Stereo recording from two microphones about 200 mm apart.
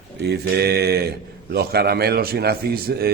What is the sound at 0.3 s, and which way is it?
A man's voice, 55° right (ahead or behind).